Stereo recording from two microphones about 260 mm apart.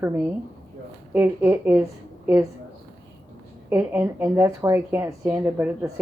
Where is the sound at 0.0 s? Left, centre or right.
Centre.